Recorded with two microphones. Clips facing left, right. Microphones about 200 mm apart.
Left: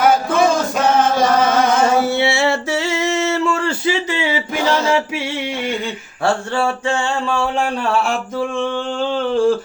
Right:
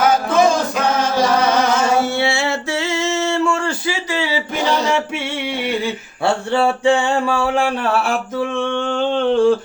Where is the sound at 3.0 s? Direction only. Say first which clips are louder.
Right 1 dB; 20° left (ahead or behind).